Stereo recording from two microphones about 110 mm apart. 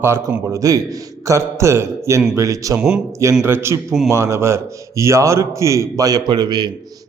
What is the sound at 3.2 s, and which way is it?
A man's voice, 25° right (ahead or behind).